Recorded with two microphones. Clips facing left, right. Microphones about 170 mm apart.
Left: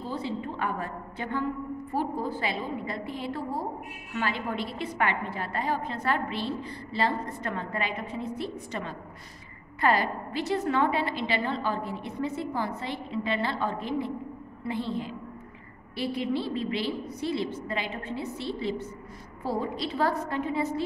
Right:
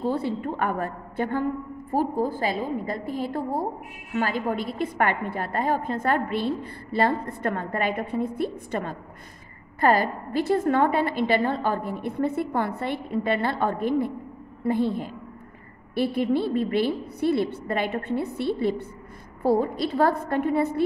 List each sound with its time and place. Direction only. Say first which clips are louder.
0.0 s a woman's voice: right 7 dB; 60° right (ahead or behind)